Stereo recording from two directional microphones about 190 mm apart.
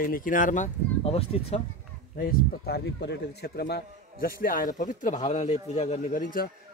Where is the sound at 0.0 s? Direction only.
45° left (ahead or behind).